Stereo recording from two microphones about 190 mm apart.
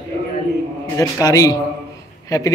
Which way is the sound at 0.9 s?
15° left (ahead or behind).